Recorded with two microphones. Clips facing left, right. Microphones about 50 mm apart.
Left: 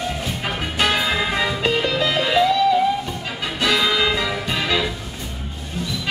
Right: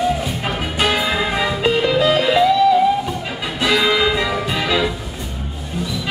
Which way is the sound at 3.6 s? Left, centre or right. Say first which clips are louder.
Right 3 dB; centre.